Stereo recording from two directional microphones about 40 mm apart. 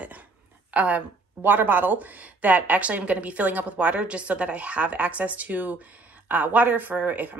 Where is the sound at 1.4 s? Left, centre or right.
Right.